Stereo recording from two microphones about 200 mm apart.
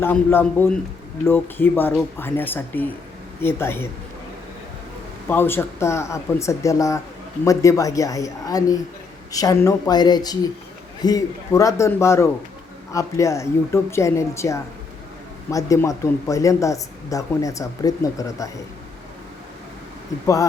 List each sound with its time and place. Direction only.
0.0 s speech: 10° left (ahead or behind)
5.3 s speech: 10° left (ahead or behind)